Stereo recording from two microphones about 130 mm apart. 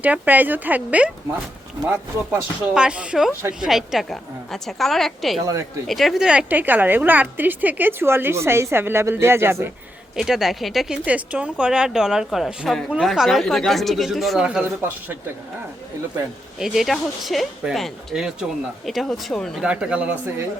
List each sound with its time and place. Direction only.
0.0 s a woman's voice: 15° right (ahead or behind)
2.7 s a woman's voice: 10° right (ahead or behind)
10.2 s speech: 5° right (ahead or behind)
16.6 s speech: 5° right (ahead or behind)
19.6 s a woman's voice: 10° right (ahead or behind)